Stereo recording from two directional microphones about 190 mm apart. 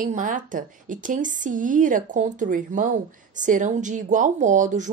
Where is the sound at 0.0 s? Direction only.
45° right (ahead or behind).